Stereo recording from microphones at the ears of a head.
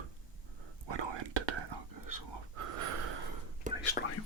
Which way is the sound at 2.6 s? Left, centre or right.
Right.